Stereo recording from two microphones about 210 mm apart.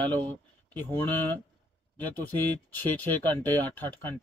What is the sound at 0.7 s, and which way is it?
Speech, 10° left (ahead or behind).